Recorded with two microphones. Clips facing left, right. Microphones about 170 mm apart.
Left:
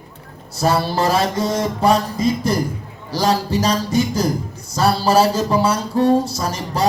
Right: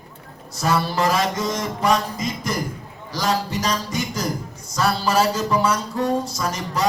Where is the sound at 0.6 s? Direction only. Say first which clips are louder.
Left 3 dB; 35° left (ahead or behind).